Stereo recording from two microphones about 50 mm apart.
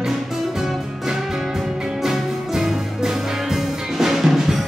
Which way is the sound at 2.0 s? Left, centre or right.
Centre.